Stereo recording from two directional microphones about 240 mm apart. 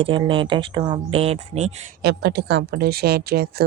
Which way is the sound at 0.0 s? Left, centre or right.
Right.